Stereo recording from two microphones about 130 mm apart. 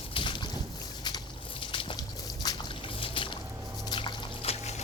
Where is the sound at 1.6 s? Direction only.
40° left (ahead or behind).